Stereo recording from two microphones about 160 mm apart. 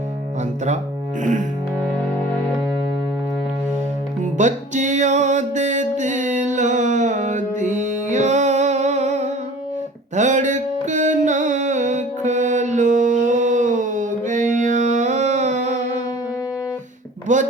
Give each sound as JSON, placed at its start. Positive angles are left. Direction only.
{"t": 1.2, "sound": "music", "side_deg": -50}
{"t": 2.0, "sound": "music", "side_deg": 10}
{"t": 4.2, "sound": "music", "side_deg": -50}
{"t": 17.3, "sound": "a sound", "side_deg": -50}